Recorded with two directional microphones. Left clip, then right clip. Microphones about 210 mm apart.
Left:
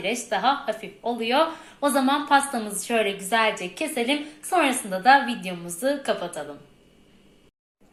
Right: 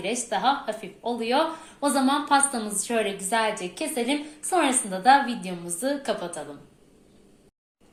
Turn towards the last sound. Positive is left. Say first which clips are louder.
# left 2 dB
turn(degrees=0)  # may be behind; listen again after turning